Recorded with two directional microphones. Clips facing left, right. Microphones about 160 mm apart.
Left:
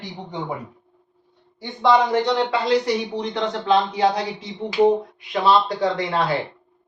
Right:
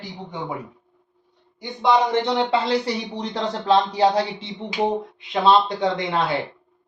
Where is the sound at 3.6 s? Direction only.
35° right (ahead or behind).